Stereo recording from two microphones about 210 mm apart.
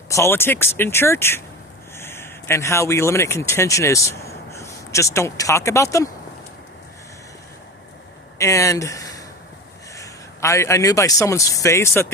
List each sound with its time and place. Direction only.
0.1 s speech: 10° left (ahead or behind)
8.4 s a man's voice: 15° left (ahead or behind)